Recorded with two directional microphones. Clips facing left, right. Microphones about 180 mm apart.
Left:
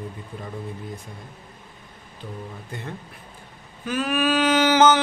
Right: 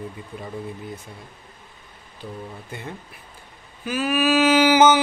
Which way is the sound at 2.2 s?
10° right (ahead or behind).